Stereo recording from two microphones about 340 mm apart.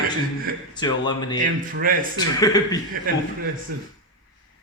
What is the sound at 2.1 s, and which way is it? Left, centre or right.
Speech, centre.